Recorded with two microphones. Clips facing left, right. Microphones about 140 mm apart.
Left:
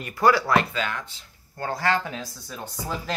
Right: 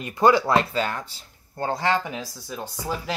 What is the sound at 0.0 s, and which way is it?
Speech, 20° right (ahead or behind).